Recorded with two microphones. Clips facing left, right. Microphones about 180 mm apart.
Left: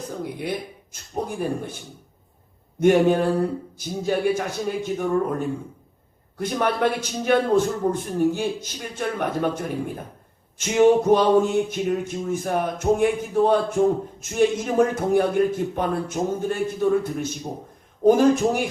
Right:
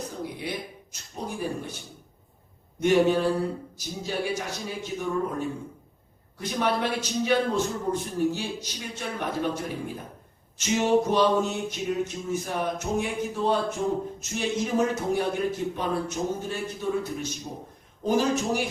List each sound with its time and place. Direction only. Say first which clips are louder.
1.1 s speech: left 5 dB; 55° left (ahead or behind)
2.8 s speech: left 4 dB; 50° left (ahead or behind)
6.4 s speech: left 4 dB; 50° left (ahead or behind)